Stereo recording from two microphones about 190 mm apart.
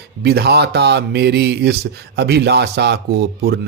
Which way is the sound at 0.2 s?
60° right (ahead or behind).